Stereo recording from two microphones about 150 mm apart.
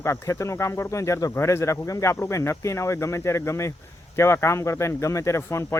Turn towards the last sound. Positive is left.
turn(degrees=20)  # may be behind; listen again after turning